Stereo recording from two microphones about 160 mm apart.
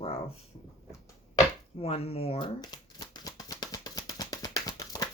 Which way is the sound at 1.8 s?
40° left (ahead or behind).